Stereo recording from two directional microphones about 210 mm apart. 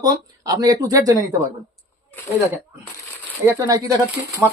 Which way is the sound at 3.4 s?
15° right (ahead or behind).